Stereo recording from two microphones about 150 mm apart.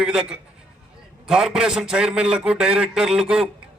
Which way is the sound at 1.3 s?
5° right (ahead or behind).